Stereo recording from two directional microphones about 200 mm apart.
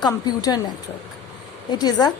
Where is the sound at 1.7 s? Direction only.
20° left (ahead or behind).